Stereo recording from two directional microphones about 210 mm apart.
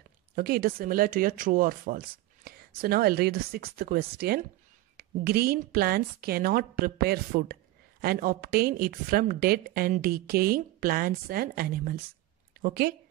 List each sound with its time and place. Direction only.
0.4 s a woman's voice: 45° right (ahead or behind)